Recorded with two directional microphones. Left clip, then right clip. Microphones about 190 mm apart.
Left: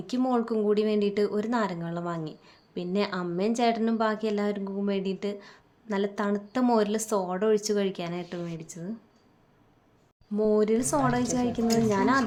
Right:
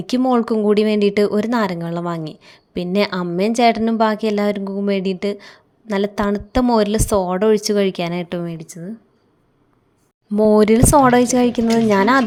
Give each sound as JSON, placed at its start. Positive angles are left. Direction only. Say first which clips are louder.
{"t": 0.1, "sound": "speech", "louder": "right 10 dB", "side_deg": -40}
{"t": 10.3, "sound": "a woman's voice", "louder": "right 11 dB", "side_deg": -45}